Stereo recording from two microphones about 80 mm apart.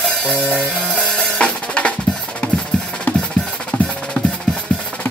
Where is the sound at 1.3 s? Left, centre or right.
Centre.